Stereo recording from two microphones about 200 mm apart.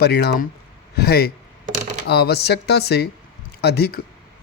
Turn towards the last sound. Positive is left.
turn(degrees=50)  # may be behind; listen again after turning